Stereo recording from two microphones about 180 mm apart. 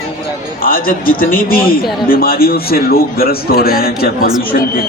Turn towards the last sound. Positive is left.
turn(degrees=50)  # may be behind; listen again after turning